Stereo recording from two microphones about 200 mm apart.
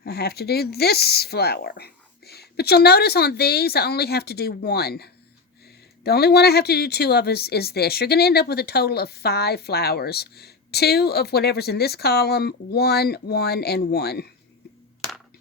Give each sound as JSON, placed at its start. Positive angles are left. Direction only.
{"t": 0.0, "sound": "speech", "side_deg": 55}